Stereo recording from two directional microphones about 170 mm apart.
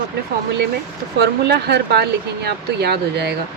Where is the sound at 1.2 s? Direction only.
75° right (ahead or behind).